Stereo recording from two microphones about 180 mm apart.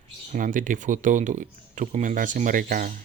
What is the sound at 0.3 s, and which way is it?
Speech, 45° right (ahead or behind).